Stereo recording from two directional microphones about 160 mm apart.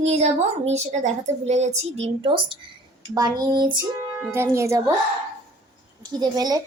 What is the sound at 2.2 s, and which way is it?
A woman's voice, 30° right (ahead or behind).